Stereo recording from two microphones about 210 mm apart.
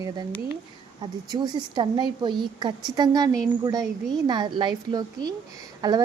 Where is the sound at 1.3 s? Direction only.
20° right (ahead or behind).